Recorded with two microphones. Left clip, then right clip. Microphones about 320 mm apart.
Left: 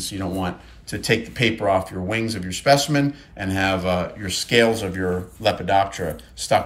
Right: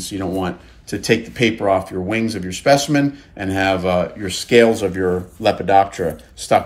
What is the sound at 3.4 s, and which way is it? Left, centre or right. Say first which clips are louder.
Speech: right 4 dB; centre.